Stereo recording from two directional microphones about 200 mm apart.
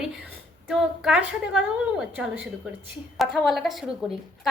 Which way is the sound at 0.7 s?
5° right (ahead or behind).